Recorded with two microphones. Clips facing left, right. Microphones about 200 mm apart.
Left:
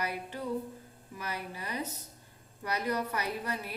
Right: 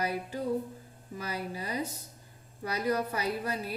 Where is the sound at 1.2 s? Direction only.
30° right (ahead or behind).